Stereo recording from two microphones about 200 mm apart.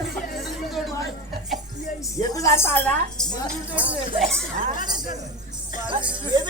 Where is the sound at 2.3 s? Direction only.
15° left (ahead or behind).